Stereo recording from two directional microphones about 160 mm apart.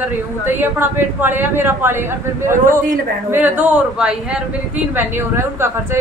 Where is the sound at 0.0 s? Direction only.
10° right (ahead or behind).